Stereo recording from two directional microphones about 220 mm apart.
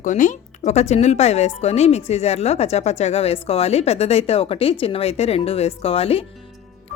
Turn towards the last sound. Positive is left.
turn(degrees=25)  # may be behind; listen again after turning